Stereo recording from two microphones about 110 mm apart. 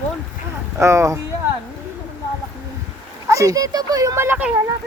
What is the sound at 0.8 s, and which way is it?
Speech, 25° right (ahead or behind).